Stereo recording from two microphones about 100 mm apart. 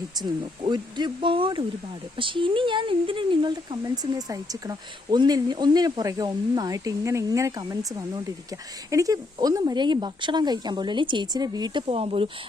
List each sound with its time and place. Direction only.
0.2 s speech: 50° right (ahead or behind)
3.8 s speech: 40° right (ahead or behind)
11.8 s speech: 80° right